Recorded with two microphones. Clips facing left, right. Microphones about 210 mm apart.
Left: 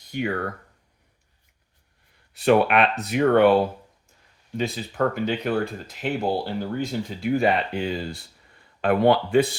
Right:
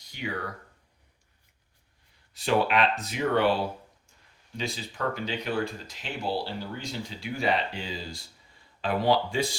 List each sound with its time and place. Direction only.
0.1 s speech: 55° left (ahead or behind)
2.3 s speech: 60° left (ahead or behind)